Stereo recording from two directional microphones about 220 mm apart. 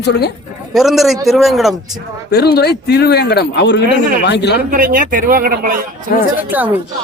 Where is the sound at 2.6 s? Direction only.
45° left (ahead or behind).